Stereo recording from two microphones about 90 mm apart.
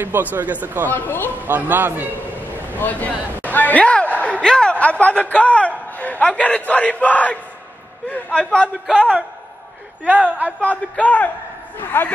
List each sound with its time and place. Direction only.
0.0 s speech: 20° right (ahead or behind)
0.8 s speech: 20° left (ahead or behind)
1.4 s speech: 20° right (ahead or behind)
2.5 s a man's voice: 20° left (ahead or behind)
10.0 s a woman's voice: 15° right (ahead or behind)
10.7 s a man's voice: 15° left (ahead or behind)